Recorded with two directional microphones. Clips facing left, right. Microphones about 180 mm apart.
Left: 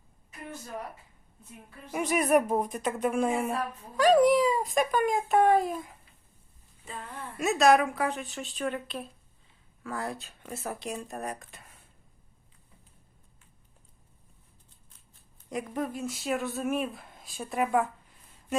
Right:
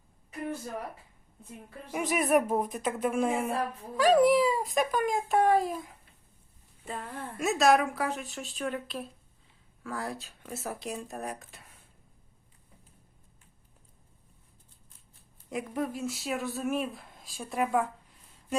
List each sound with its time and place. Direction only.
1.9 s speech: centre (ahead or behind)
6.8 s speech: 55° right (ahead or behind)
7.3 s speech: centre (ahead or behind)
15.4 s speech: centre (ahead or behind)